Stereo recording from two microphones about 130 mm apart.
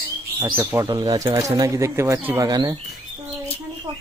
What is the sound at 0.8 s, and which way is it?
Speech, 30° right (ahead or behind).